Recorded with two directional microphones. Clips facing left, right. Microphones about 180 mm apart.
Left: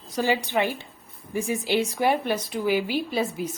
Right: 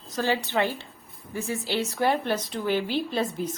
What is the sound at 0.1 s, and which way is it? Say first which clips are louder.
A woman's voice: left 2 dB; 15° left (ahead or behind).